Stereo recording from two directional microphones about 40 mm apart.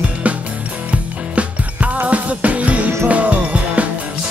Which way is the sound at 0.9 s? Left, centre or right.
Right.